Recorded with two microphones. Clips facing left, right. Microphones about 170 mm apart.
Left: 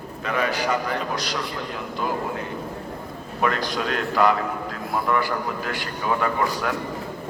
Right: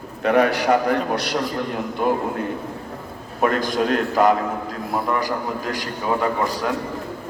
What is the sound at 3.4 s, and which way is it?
Speech, 45° right (ahead or behind).